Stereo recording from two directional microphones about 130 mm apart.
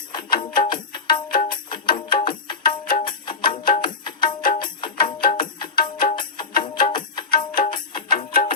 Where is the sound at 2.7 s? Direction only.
90° left.